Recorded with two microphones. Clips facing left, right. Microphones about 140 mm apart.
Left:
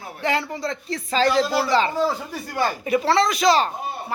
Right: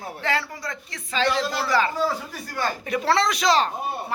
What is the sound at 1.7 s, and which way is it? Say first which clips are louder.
Speech: left 2 dB; 25° left (ahead or behind).